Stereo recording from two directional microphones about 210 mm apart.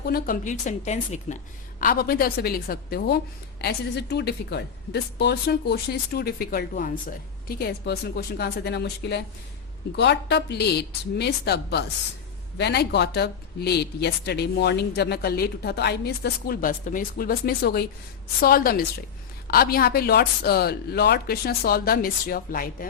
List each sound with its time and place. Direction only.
0.0 s a woman's voice: 45° left (ahead or behind)